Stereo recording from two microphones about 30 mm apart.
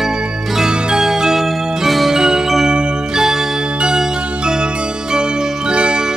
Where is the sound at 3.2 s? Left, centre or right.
Centre; by 6.0 s right.